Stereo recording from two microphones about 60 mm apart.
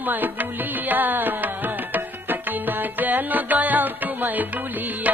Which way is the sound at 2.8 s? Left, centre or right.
Right.